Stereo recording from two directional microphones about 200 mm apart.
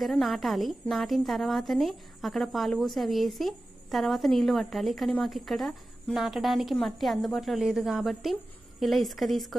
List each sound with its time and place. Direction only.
0.0 s a woman's voice: centre (ahead or behind)